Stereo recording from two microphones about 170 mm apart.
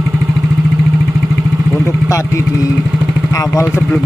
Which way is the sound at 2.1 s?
20° left (ahead or behind).